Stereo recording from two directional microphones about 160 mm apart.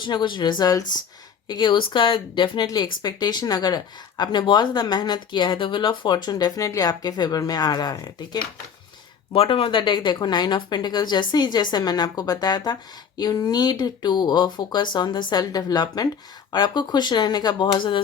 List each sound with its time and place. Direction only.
0.0 s speech: 30° left (ahead or behind)
9.3 s speech: 35° left (ahead or behind)